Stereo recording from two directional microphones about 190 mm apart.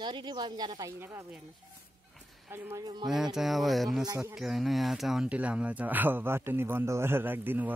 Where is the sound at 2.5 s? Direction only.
20° right (ahead or behind).